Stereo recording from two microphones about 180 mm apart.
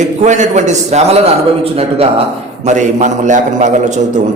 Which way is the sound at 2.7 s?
40° right (ahead or behind).